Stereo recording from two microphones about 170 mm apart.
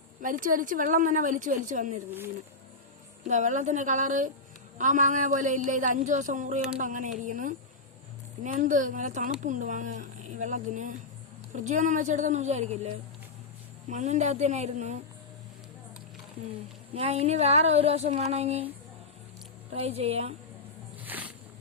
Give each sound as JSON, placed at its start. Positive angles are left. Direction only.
{"t": 0.2, "sound": "speech", "side_deg": -50}
{"t": 2.0, "sound": "speech", "side_deg": -10}
{"t": 3.2, "sound": "speech", "side_deg": -45}
{"t": 13.9, "sound": "speech", "side_deg": -45}
{"t": 16.9, "sound": "speech", "side_deg": -35}
{"t": 19.7, "sound": "speech", "side_deg": -35}
{"t": 21.0, "sound": "music", "side_deg": -10}